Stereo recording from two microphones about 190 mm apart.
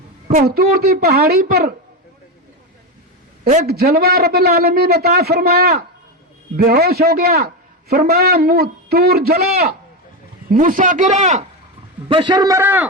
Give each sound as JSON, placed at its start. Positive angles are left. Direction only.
{"t": 0.3, "sound": "a man's voice", "side_deg": -50}
{"t": 3.5, "sound": "a man's voice", "side_deg": -55}
{"t": 12.0, "sound": "a man's voice", "side_deg": -25}